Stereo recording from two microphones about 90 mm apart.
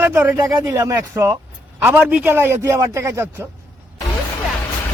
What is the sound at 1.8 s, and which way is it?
A man's voice, 20° right (ahead or behind).